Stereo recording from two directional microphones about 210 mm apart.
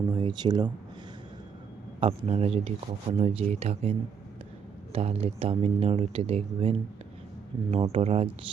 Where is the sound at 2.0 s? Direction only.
25° right (ahead or behind).